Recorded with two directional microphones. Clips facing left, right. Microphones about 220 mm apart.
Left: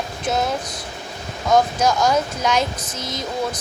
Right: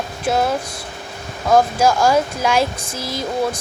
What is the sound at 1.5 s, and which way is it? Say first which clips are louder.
Speech: right 3 dB; 5° right (ahead or behind).